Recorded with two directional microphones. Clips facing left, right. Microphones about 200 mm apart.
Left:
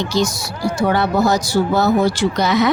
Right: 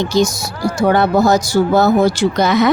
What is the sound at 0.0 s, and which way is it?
Speech, 45° right (ahead or behind).